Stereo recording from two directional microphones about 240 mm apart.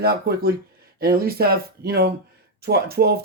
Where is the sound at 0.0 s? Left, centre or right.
Right.